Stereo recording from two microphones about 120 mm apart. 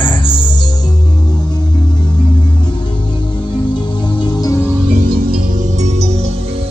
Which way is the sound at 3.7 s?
40° left (ahead or behind).